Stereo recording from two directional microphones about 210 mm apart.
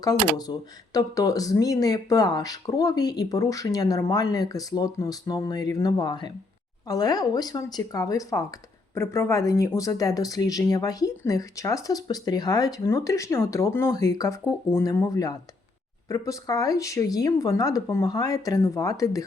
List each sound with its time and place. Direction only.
0.0 s speech: 20° left (ahead or behind)